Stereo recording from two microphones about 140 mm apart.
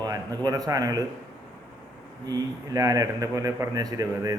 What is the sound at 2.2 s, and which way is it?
A man's voice, 25° right (ahead or behind).